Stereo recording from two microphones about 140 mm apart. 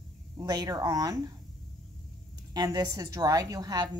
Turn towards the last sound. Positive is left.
turn(degrees=-25)  # may be behind; listen again after turning